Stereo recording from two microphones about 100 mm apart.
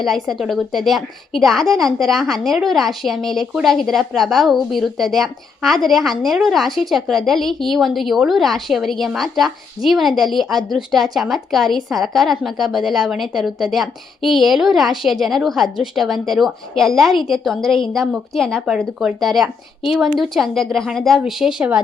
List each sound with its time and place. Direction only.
0.0 s a woman's voice: centre (ahead or behind)
18.7 s a woman's voice: 5° right (ahead or behind)